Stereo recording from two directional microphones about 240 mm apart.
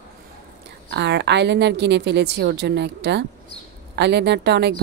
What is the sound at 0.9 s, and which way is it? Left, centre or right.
A woman's voice, right.